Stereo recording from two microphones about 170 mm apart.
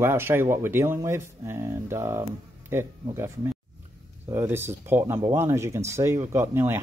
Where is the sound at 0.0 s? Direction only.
15° right (ahead or behind).